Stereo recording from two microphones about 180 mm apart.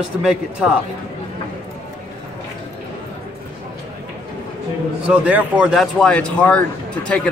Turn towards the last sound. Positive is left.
turn(degrees=5)  # may be behind; listen again after turning